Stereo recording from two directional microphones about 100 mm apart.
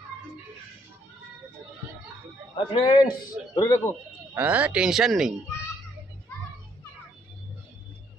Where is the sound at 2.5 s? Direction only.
50° left (ahead or behind).